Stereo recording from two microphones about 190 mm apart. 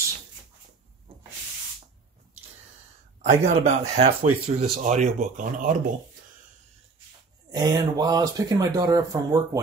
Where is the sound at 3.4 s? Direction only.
35° right (ahead or behind).